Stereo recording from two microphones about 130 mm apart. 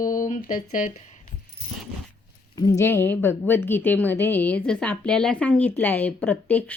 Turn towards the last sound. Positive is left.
turn(degrees=15)  # may be behind; listen again after turning